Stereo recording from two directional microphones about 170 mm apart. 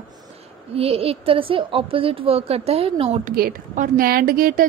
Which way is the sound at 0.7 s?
35° right (ahead or behind).